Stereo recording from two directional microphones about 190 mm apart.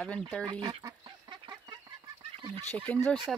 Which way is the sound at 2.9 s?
10° left (ahead or behind).